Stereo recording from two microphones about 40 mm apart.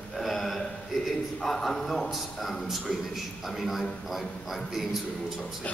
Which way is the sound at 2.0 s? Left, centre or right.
Centre.